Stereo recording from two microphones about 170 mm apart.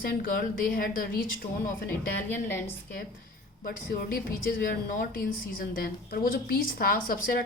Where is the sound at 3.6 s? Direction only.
55° left (ahead or behind).